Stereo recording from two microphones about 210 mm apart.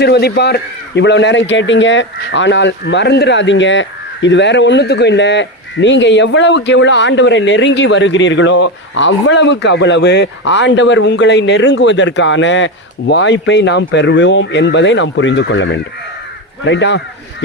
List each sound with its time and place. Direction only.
0.0 s a man's voice: 50° left (ahead or behind)